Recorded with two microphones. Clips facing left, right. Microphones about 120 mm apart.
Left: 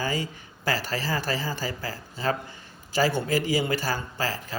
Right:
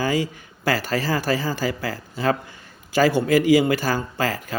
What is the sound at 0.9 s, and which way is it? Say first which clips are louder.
A man's voice: right 6 dB; 45° right (ahead or behind).